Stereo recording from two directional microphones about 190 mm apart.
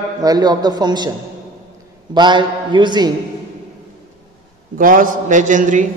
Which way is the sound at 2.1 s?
25° right (ahead or behind).